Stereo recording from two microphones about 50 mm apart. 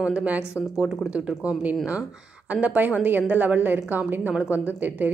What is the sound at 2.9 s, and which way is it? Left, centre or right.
Speech, right.